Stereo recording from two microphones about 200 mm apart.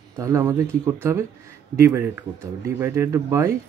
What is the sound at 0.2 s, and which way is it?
A man's voice, 15° right (ahead or behind).